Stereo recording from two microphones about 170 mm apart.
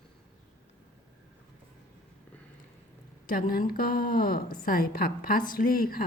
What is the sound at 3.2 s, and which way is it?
A woman's voice, 55° left (ahead or behind).